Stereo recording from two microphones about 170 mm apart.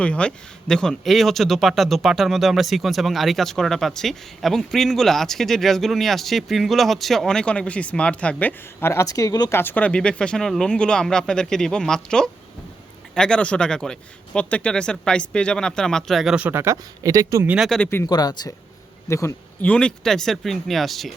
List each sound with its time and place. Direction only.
0.0 s speech: 5° left (ahead or behind); by 17.7 s 10° right (ahead or behind)
17.7 s speech: 5° left (ahead or behind)
18.0 s speech: 25° left (ahead or behind); by 21.1 s centre (ahead or behind)